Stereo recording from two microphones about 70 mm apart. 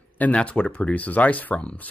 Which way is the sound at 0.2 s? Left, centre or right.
Centre.